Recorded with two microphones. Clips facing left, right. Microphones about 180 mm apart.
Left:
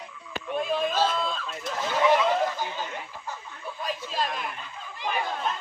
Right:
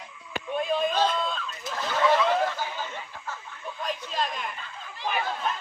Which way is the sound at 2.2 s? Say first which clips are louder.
Even; 5° left (ahead or behind).